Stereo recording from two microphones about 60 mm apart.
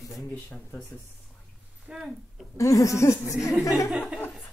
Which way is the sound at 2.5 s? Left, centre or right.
Left.